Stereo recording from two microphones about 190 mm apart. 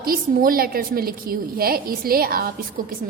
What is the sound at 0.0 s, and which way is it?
A woman's voice, 50° right (ahead or behind).